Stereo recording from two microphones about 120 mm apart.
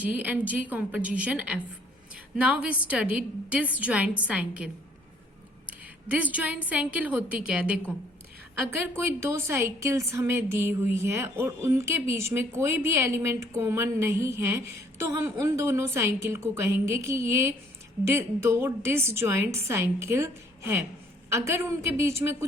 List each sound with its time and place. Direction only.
0.0 s a woman's voice: 15° right (ahead or behind)
6.1 s a woman's voice: 10° right (ahead or behind)
8.5 s a woman's voice: 20° right (ahead or behind)